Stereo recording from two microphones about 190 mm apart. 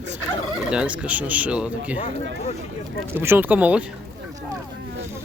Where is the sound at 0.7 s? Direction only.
5° right (ahead or behind).